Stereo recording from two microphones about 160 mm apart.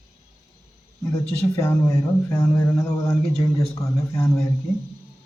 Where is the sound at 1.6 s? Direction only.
20° left (ahead or behind).